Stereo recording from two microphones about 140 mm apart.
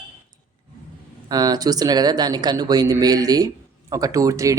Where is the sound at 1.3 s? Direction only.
30° right (ahead or behind).